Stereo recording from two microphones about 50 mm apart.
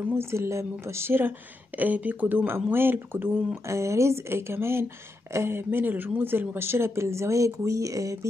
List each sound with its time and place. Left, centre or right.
0.2 s speech: right
1.8 s speech: right
3.6 s speech: right